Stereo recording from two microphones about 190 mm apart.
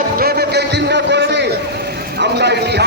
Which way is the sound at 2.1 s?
60° right (ahead or behind).